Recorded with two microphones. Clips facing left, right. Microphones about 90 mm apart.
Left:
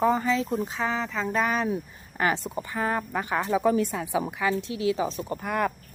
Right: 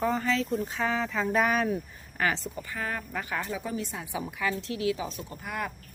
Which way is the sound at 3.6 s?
70° left (ahead or behind).